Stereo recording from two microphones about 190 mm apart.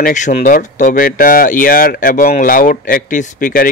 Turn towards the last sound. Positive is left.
turn(degrees=45)  # may be behind; listen again after turning